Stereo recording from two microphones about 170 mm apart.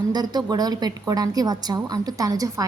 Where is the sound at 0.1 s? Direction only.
25° right (ahead or behind).